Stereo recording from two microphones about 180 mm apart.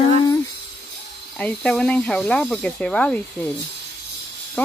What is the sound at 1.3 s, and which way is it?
Speech, 5° left (ahead or behind).